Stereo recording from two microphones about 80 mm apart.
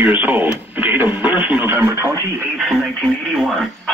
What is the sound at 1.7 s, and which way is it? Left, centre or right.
Speech, right.